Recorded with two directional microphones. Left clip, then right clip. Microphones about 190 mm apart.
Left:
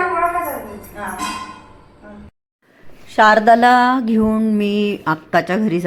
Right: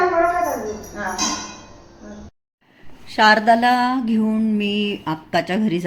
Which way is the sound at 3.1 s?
10° left (ahead or behind).